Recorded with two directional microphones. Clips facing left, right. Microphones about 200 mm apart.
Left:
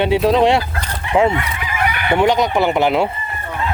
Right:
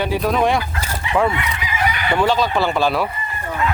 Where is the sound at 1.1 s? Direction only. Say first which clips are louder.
Left 4 dB; 25° left (ahead or behind).